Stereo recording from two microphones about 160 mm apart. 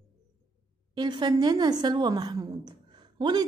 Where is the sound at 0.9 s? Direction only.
25° right (ahead or behind).